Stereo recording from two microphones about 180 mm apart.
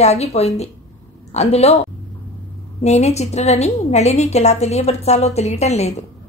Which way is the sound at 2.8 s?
35° left (ahead or behind).